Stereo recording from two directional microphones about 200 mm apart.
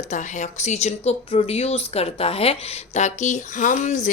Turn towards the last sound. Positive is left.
turn(degrees=40)  # may be behind; listen again after turning